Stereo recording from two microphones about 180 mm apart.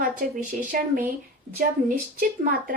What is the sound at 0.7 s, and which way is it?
Speech, 50° right (ahead or behind).